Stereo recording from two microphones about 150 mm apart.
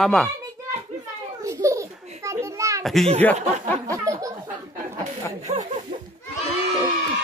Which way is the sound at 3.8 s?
20° right (ahead or behind).